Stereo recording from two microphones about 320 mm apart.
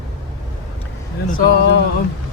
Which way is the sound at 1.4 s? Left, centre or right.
Left.